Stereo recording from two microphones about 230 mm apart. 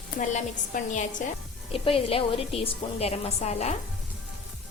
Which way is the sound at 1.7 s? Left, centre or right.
Left.